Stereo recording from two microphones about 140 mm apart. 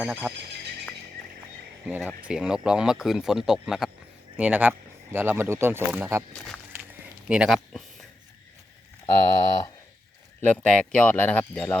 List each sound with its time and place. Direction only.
0.0 s speech: 5° right (ahead or behind)
2.0 s speech: 10° right (ahead or behind)
7.3 s speech: 5° right (ahead or behind)
9.0 s speech: 25° left (ahead or behind)
10.4 s speech: 10° left (ahead or behind)